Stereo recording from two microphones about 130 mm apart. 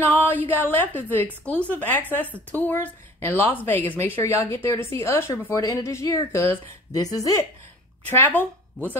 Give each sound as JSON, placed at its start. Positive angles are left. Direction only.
{"t": 0.0, "sound": "a woman's voice", "side_deg": 15}
{"t": 8.1, "sound": "speech", "side_deg": 15}